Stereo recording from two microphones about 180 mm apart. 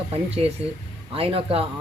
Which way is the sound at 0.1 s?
35° right (ahead or behind).